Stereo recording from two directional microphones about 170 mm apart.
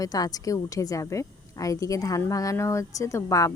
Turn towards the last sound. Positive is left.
turn(degrees=20)  # may be behind; listen again after turning